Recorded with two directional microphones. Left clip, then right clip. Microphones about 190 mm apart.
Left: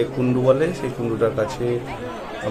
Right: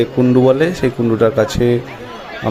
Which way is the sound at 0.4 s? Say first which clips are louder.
Right 5 dB; 40° right (ahead or behind).